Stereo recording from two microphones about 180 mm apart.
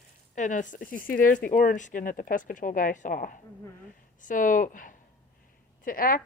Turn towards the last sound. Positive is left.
turn(degrees=55)  # may be behind; listen again after turning